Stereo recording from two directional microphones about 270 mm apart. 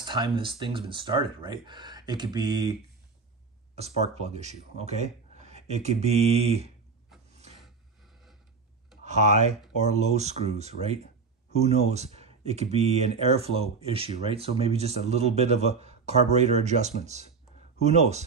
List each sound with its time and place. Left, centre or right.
0.0 s speech: centre
9.0 s speech: right